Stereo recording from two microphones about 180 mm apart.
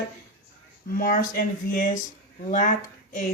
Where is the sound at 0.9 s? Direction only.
50° left (ahead or behind).